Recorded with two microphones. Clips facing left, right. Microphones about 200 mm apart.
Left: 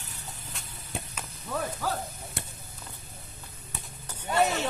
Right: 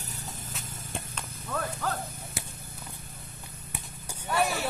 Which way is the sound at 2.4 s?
Centre (ahead or behind).